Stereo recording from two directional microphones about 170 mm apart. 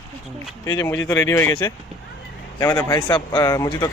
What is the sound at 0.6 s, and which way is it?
Speech, 20° left (ahead or behind).